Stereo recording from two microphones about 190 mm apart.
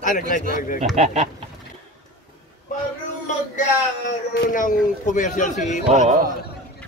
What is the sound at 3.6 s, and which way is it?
Speech, 45° left (ahead or behind).